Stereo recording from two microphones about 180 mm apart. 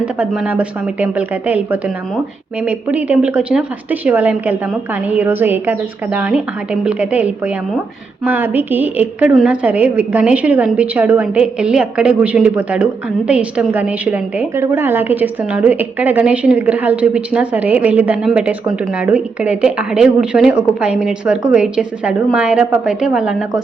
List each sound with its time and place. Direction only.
0.0 s a woman's voice: 5° right (ahead or behind)